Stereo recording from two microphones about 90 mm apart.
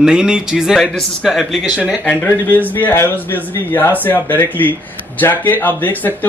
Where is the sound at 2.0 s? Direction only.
20° left (ahead or behind).